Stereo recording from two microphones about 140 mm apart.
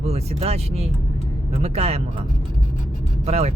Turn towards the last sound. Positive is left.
turn(degrees=-50)  # may be behind; listen again after turning